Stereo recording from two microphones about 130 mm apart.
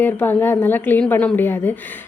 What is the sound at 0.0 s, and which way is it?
A woman's voice, 15° left (ahead or behind).